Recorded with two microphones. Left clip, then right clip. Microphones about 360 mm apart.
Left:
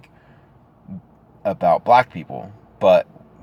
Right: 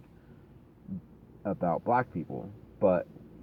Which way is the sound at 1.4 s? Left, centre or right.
Centre.